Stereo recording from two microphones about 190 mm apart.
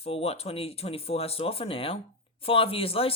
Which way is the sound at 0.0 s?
30° left (ahead or behind).